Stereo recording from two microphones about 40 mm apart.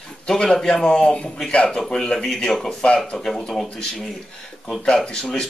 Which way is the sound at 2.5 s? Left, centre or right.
Centre.